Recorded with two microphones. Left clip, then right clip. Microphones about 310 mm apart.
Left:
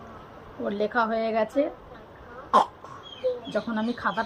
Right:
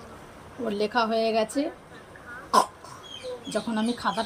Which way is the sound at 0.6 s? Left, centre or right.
Centre.